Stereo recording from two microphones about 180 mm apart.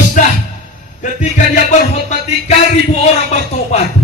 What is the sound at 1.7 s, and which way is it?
Speech, 40° left (ahead or behind).